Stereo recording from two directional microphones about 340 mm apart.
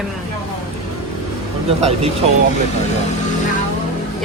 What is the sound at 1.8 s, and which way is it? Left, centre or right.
Speech, centre.